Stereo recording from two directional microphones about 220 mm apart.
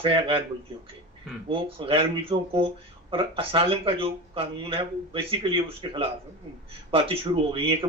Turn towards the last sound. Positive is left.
turn(degrees=-25)  # may be behind; listen again after turning